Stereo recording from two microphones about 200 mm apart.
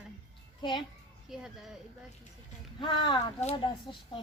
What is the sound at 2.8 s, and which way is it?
Speech, 25° left (ahead or behind).